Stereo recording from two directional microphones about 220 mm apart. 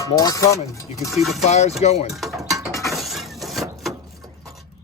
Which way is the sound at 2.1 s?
Centre (ahead or behind).